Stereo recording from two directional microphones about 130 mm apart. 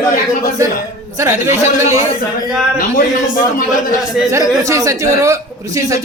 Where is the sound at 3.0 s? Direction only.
90° left.